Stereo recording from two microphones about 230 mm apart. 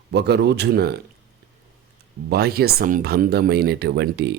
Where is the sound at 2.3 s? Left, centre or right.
Right.